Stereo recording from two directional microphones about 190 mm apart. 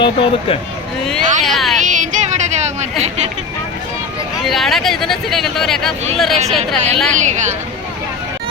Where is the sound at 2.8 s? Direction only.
35° right (ahead or behind).